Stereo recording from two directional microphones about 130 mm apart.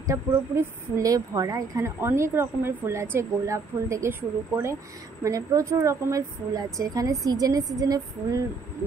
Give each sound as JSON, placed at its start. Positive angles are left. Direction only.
{"t": 0.0, "sound": "speech", "side_deg": -25}